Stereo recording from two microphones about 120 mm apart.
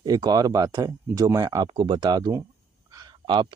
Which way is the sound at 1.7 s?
40° right (ahead or behind).